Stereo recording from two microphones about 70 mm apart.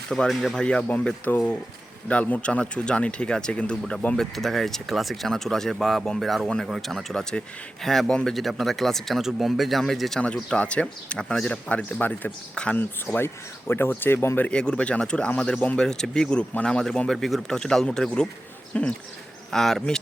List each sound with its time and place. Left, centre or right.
0.1 s speech: centre
8.3 s speech: centre
11.7 s speech: left
13.1 s speech: left
14.5 s speech: centre
19.5 s speech: centre